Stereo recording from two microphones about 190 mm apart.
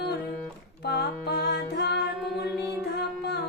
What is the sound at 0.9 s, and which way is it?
Music, 60° left (ahead or behind).